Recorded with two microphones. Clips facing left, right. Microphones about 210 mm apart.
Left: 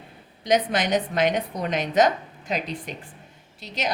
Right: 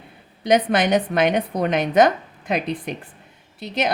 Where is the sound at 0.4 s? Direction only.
60° right (ahead or behind).